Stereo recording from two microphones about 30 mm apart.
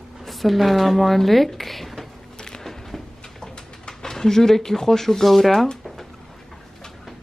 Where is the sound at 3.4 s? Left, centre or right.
Left.